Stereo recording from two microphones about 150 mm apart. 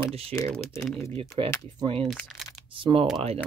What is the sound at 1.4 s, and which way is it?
Speech, 35° right (ahead or behind).